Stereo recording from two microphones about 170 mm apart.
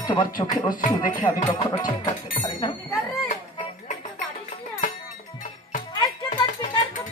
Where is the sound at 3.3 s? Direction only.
45° left (ahead or behind).